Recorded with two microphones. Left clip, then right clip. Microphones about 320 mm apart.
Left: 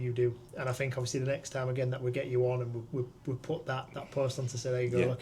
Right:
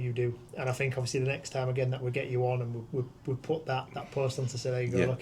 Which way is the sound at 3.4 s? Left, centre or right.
Left.